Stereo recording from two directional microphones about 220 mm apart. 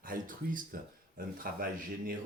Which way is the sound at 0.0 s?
40° right (ahead or behind).